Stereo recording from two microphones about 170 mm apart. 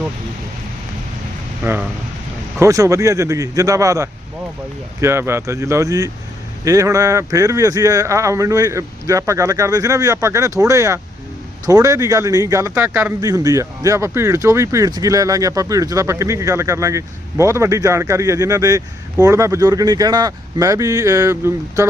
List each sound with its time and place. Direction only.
1.6 s speech: 10° right (ahead or behind)
13.2 s speech: 20° right (ahead or behind)